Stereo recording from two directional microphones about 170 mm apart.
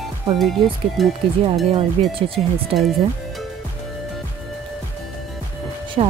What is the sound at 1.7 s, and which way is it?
Speech, 35° right (ahead or behind).